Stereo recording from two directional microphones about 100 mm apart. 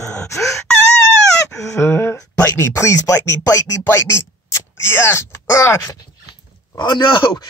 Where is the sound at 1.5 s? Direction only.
30° left (ahead or behind).